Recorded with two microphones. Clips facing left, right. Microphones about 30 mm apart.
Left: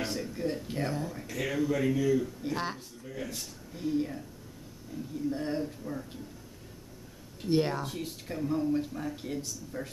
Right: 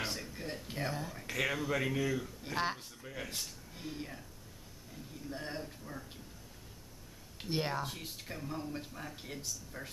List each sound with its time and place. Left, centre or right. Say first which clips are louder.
0.0 s speech: left 7 dB; centre
1.2 s speech: left 3 dB; right
3.3 s speech: left 2 dB; centre
7.4 s speech: left 7 dB; centre